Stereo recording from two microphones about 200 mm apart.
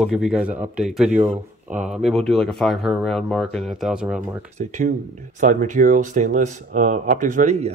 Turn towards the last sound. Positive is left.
turn(degrees=-35)  # may be behind; listen again after turning